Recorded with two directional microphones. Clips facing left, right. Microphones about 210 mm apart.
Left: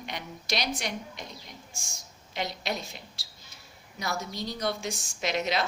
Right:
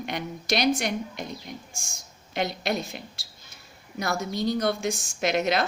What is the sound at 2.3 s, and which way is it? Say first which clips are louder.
A woman's voice: right 5 dB; 55° right (ahead or behind).